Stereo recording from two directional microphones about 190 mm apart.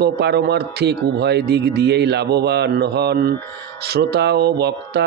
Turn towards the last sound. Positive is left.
turn(degrees=-60)  # may be behind; listen again after turning